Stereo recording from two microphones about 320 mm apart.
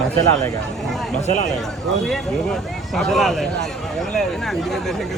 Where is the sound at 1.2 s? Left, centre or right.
Left.